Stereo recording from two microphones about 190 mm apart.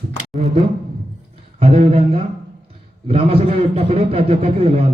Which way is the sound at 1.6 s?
30° right (ahead or behind).